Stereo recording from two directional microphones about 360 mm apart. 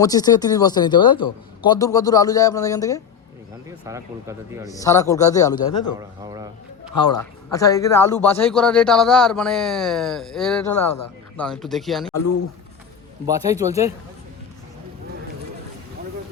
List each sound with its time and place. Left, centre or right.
0.0 s speech: centre
3.8 s speech: centre
4.7 s speech: centre
6.0 s a man's voice: centre
6.9 s a man's voice: centre
12.1 s speech: left
13.2 s speech: centre